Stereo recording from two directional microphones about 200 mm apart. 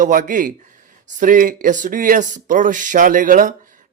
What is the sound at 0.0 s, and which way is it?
A man's voice, 40° right (ahead or behind).